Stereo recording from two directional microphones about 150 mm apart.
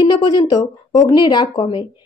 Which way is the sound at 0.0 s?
30° left (ahead or behind).